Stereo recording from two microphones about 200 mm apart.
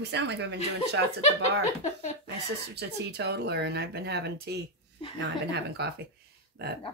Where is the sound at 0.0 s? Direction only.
60° right (ahead or behind).